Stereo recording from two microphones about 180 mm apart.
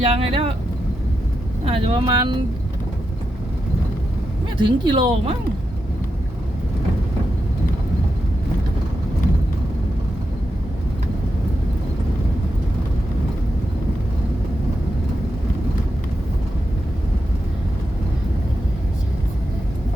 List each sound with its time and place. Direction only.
0.0 s speech: 35° right (ahead or behind)
1.6 s speech: 30° right (ahead or behind)
4.5 s speech: 25° right (ahead or behind)